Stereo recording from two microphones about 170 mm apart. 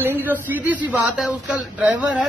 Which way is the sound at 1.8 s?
5° right (ahead or behind).